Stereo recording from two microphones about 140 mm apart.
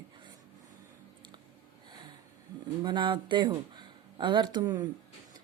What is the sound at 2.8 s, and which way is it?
Speech, 35° right (ahead or behind).